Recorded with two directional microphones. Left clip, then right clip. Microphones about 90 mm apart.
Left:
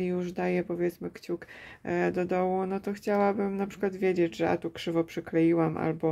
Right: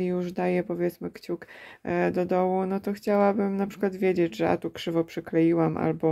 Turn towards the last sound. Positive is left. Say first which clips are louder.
# right 2 dB
turn(degrees=-30)  # may be behind; listen again after turning